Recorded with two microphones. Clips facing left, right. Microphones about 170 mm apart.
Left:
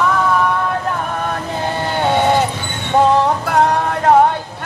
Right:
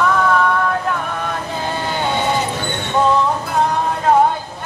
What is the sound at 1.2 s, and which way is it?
Vehicle, 55° left (ahead or behind).